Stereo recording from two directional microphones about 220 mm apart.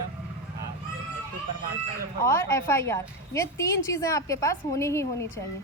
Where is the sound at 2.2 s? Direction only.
10° left (ahead or behind).